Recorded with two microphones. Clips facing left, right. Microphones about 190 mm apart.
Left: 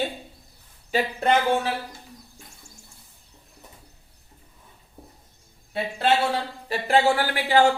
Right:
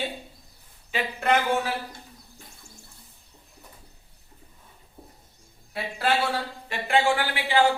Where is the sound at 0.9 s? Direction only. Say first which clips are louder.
Left 3 dB; 35° left (ahead or behind).